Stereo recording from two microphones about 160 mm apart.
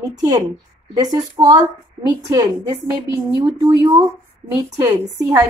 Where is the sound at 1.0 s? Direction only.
25° right (ahead or behind).